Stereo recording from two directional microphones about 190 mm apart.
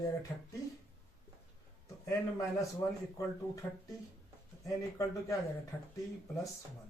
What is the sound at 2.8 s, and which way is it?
Speech, 15° left (ahead or behind).